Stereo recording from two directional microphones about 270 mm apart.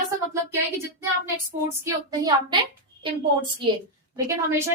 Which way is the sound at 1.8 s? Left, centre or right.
Centre.